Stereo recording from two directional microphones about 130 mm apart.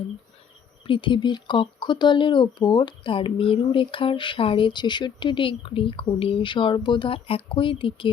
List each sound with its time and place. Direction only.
0.9 s speech: 40° left (ahead or behind)